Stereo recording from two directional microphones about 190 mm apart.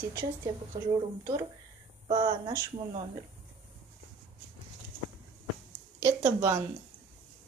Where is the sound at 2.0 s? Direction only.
25° right (ahead or behind).